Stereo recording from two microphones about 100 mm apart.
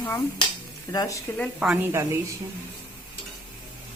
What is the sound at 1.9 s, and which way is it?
Speech, 30° right (ahead or behind).